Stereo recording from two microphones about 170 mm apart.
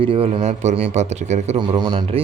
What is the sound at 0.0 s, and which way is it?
A man's voice, 35° right (ahead or behind).